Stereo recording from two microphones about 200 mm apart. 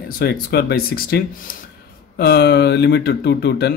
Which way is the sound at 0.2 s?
50° left (ahead or behind).